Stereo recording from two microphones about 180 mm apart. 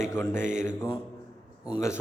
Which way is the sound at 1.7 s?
15° left (ahead or behind).